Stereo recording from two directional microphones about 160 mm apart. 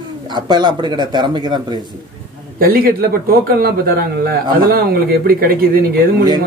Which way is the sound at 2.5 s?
65° right (ahead or behind).